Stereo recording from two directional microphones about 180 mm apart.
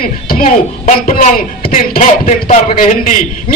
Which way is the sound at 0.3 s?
50° left (ahead or behind).